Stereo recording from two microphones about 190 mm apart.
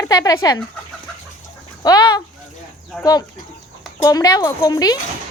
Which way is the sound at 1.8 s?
20° left (ahead or behind).